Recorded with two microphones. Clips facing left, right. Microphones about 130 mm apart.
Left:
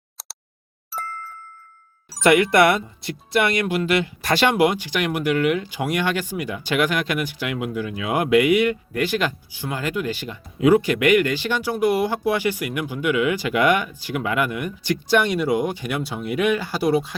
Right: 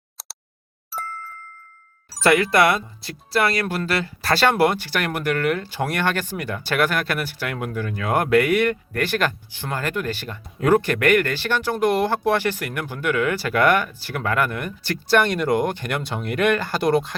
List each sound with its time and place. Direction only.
0.9 s ding: centre (ahead or behind)
2.2 s speech: 20° left (ahead or behind)